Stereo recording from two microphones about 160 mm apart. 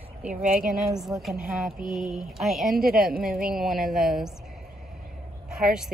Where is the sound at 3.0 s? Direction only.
65° right (ahead or behind).